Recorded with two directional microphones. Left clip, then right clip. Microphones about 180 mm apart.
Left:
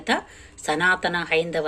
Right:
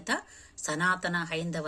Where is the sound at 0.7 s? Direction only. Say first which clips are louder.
Left 8 dB; 45° right (ahead or behind).